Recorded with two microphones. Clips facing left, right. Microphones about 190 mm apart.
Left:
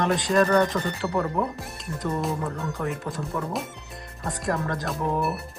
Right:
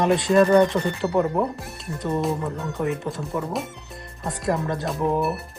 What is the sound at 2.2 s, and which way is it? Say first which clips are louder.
Speech: right 3 dB; centre (ahead or behind).